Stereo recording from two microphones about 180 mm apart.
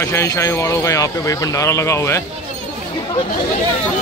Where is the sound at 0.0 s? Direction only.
15° left (ahead or behind).